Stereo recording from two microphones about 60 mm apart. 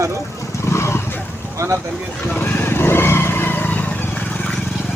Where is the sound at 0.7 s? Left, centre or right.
Left.